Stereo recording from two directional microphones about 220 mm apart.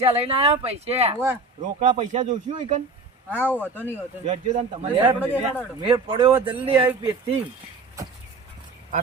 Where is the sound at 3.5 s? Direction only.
10° left (ahead or behind).